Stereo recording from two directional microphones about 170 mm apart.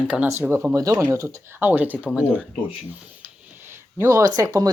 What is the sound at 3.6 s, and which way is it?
Speech, 15° right (ahead or behind).